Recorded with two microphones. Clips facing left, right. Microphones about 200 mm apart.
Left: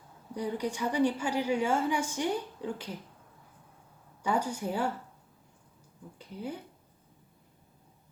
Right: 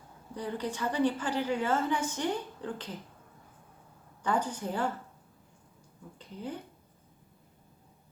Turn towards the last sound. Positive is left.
turn(degrees=10)  # may be behind; listen again after turning